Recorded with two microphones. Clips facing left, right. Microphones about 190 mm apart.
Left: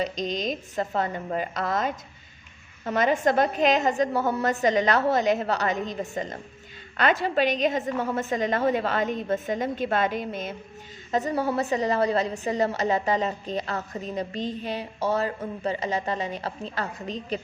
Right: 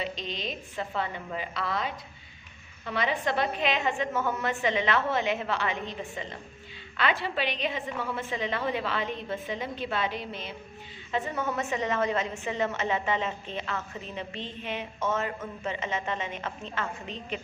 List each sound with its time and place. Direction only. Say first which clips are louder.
0.0 s a woman's voice: left 7 dB; 40° left (ahead or behind)